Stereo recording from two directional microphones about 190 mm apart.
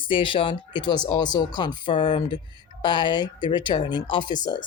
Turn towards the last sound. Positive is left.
turn(degrees=25)  # may be behind; listen again after turning